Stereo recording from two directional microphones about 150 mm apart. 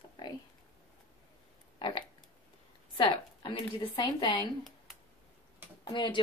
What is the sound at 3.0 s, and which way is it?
Speech, 35° left (ahead or behind).